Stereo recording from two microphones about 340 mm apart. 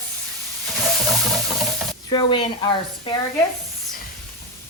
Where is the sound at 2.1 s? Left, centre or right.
Centre.